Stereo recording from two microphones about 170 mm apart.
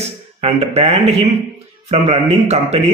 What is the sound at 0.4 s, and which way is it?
Speech, 35° right (ahead or behind).